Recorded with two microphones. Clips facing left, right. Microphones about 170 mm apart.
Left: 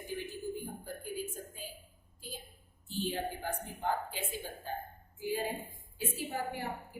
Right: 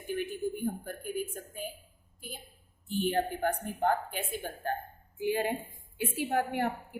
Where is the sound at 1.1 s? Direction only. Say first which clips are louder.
Right 5 dB; 60° right (ahead or behind).